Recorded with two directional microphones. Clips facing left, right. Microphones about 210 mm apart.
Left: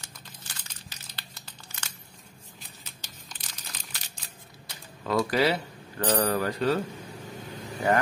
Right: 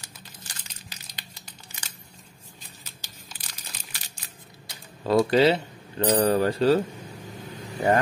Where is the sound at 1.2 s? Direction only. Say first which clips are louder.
Right 1 dB; 15° right (ahead or behind).